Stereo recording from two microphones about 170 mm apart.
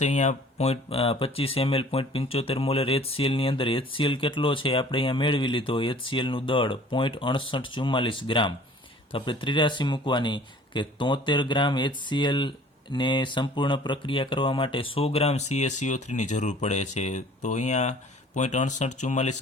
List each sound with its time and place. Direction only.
0.0 s speech: 45° left (ahead or behind)